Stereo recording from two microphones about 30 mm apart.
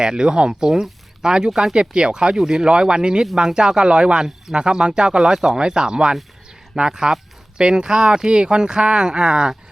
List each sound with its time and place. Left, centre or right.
0.0 s speech: right